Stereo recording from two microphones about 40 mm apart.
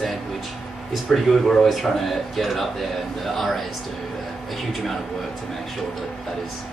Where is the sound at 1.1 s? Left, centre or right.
Centre.